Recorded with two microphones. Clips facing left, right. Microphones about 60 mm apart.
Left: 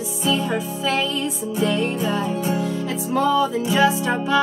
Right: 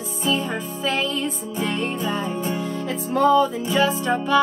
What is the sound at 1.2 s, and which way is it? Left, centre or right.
Music, right.